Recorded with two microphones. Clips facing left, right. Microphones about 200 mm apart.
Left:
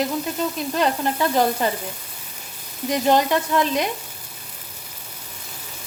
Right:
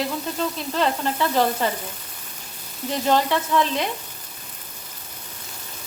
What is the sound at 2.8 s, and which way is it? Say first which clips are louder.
Sizzle: left 2 dB; 15° left (ahead or behind).